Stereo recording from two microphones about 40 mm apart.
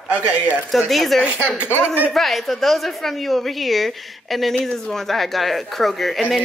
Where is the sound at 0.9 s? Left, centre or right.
Centre.